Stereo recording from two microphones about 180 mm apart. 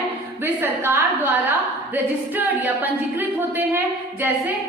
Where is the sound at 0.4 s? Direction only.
15° right (ahead or behind).